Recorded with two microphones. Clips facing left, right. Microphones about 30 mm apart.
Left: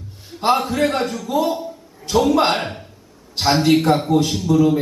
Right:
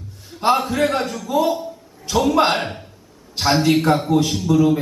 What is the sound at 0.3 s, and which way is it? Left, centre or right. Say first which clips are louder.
A man's voice: even; centre.